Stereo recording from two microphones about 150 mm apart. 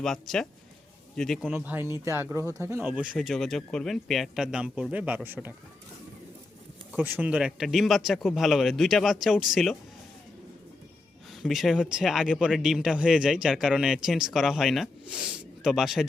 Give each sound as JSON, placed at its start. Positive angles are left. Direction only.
{"t": 0.0, "sound": "speech", "side_deg": 5}
{"t": 1.5, "sound": "speech", "side_deg": -10}
{"t": 2.8, "sound": "speech", "side_deg": -10}
{"t": 6.9, "sound": "speech", "side_deg": -10}
{"t": 11.3, "sound": "speech", "side_deg": 0}